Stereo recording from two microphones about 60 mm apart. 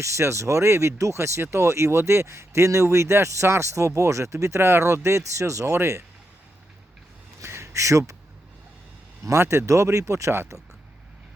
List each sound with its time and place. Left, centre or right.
0.0 s speech: right
7.4 s a sound: right
9.2 s speech: right